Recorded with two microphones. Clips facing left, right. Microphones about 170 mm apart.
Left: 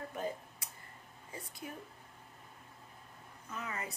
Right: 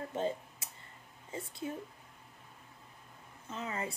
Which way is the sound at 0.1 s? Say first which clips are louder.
Right 4 dB; 25° right (ahead or behind).